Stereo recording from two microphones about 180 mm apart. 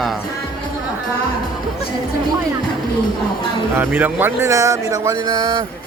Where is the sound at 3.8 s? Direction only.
10° right (ahead or behind).